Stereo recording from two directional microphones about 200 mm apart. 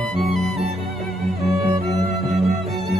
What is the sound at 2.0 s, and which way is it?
Music, 30° right (ahead or behind).